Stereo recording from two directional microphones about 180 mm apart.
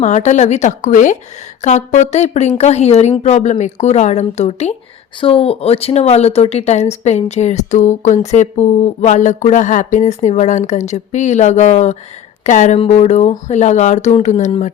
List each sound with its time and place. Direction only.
0.0 s speech: 40° left (ahead or behind)